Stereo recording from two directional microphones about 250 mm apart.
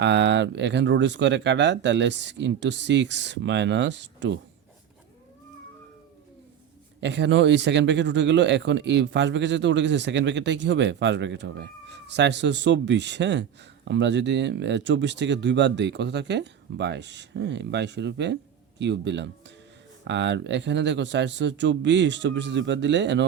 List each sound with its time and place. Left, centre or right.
0.0 s speech: right
7.0 s speech: right